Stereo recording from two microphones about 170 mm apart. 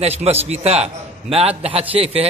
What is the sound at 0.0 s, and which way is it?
A man's voice, 35° right (ahead or behind).